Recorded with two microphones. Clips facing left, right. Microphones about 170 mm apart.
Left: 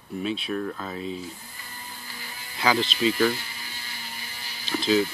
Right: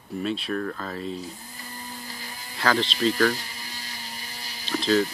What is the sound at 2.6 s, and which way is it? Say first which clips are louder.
Speech: even; 5° left (ahead or behind).